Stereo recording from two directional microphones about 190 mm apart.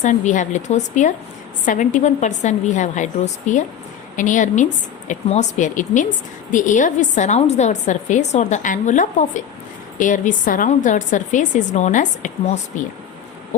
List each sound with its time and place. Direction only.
0.0 s a woman's voice: 40° left (ahead or behind)